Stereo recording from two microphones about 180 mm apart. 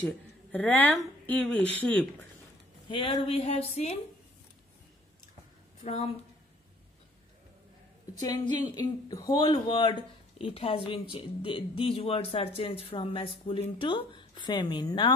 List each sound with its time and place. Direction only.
0.0 s speech: 10° left (ahead or behind)
2.9 s speech: 30° left (ahead or behind)
8.1 s speech: 20° left (ahead or behind)